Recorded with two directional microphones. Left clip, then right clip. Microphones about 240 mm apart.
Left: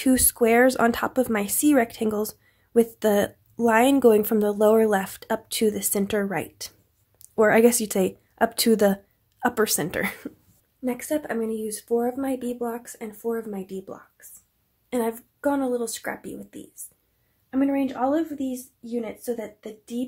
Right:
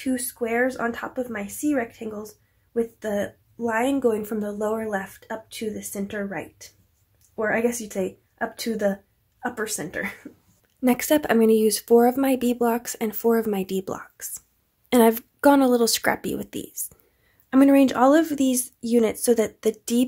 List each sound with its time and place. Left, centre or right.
0.0 s a woman's voice: left
10.8 s speech: right